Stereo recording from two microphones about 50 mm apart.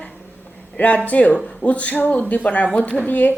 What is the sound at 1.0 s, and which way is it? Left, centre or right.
A woman's voice, left.